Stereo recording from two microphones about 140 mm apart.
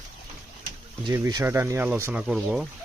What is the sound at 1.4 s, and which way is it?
Speech, 20° right (ahead or behind).